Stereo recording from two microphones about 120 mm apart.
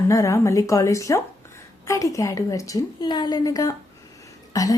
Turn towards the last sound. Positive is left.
turn(degrees=30)  # may be behind; listen again after turning